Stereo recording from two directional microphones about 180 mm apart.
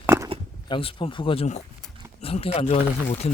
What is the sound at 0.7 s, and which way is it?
A man's voice, 30° left (ahead or behind).